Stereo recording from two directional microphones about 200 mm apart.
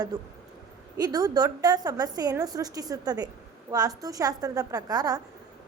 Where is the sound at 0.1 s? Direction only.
20° right (ahead or behind).